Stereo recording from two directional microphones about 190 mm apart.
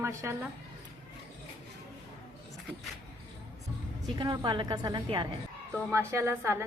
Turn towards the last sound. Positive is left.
turn(degrees=-15)  # may be behind; listen again after turning